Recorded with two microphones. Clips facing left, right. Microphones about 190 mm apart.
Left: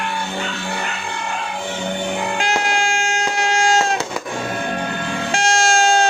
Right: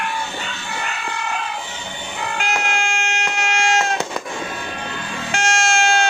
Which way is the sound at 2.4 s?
35° left (ahead or behind).